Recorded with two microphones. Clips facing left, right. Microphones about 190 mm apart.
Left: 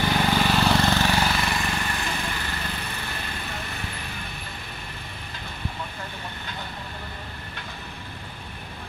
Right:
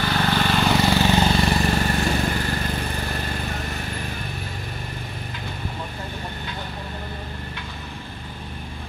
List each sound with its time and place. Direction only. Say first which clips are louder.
0.0 s vehicle: even; 15° left (ahead or behind); by 2.4 s 40° right (ahead or behind)